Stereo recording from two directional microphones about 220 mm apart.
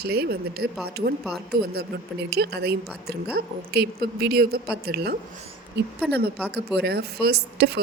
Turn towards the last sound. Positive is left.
turn(degrees=-50)  # may be behind; listen again after turning